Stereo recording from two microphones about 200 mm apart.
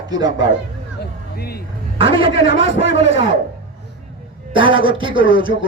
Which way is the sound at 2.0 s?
25° right (ahead or behind).